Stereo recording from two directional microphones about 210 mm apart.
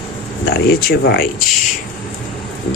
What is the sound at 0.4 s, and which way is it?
Speech, 50° left (ahead or behind).